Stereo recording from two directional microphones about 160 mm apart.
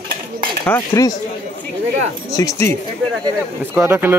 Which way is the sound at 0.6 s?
10° left (ahead or behind).